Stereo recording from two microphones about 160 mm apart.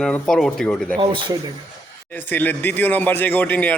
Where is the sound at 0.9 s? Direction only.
30° right (ahead or behind).